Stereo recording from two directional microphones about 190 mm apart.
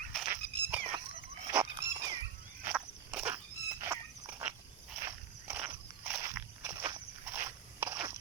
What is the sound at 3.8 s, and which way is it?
Dog, 15° right (ahead or behind).